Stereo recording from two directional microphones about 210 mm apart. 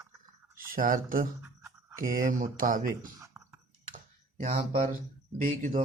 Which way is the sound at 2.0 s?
40° right (ahead or behind).